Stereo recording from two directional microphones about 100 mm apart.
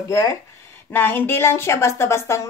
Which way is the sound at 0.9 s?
20° left (ahead or behind).